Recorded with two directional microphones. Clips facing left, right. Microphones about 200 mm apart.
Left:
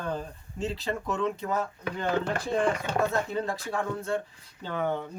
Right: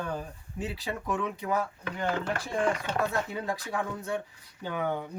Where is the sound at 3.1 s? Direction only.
10° right (ahead or behind).